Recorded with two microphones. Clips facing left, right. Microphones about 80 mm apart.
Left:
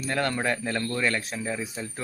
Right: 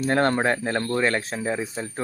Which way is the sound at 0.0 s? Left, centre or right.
Right.